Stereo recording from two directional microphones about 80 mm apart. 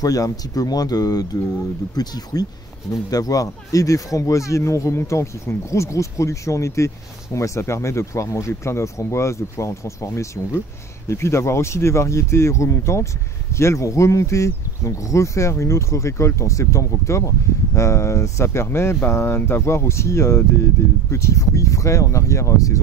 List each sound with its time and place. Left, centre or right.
0.0 s speech: left